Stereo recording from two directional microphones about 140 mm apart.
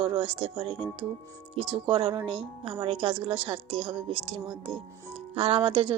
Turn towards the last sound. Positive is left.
turn(degrees=-40)  # may be behind; listen again after turning